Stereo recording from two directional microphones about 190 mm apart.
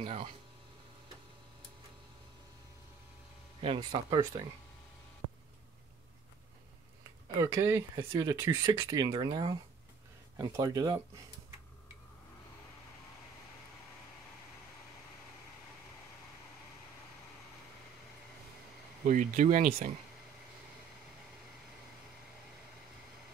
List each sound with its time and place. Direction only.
0.0 s speech: 35° right (ahead or behind)
3.6 s speech: 25° right (ahead or behind)
5.2 s a sound: 25° right (ahead or behind)
7.3 s speech: 15° right (ahead or behind)
19.0 s speech: 40° right (ahead or behind)